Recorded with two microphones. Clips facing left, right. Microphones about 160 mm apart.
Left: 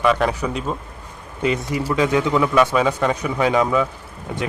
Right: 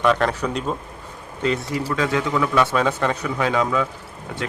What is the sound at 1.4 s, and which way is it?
Speech, 15° left (ahead or behind).